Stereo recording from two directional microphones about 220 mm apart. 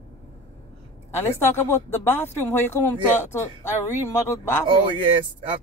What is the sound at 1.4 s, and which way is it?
Speech, 10° left (ahead or behind).